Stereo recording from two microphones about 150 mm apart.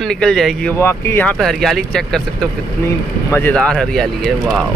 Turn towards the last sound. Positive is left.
turn(degrees=0)  # may be behind; listen again after turning